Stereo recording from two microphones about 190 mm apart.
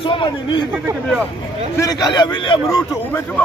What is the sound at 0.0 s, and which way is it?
Speech, 25° left (ahead or behind).